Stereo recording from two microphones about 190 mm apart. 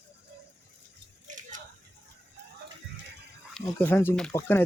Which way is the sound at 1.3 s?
40° right (ahead or behind).